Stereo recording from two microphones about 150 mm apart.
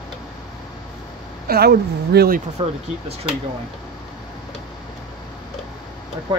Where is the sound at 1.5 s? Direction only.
90° right.